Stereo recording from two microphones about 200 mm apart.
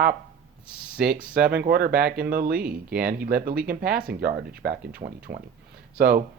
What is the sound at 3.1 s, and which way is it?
Speech, 45° right (ahead or behind).